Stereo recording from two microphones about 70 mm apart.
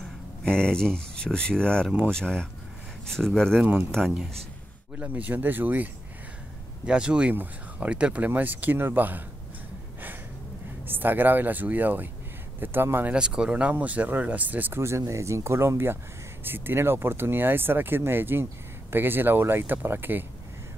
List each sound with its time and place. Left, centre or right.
0.4 s speech: centre
4.9 s speech: right
6.9 s speech: centre
10.9 s speech: right
13.1 s speech: centre
14.8 s speech: right